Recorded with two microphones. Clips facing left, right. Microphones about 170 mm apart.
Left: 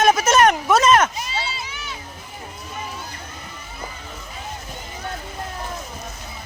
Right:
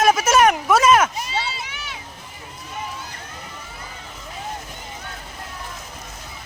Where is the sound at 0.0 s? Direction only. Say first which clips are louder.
Even; 5° right (ahead or behind).